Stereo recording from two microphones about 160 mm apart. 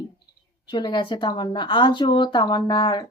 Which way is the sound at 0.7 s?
30° left (ahead or behind).